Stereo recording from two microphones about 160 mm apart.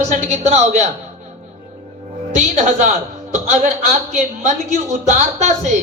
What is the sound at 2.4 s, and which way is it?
Speech, 50° right (ahead or behind).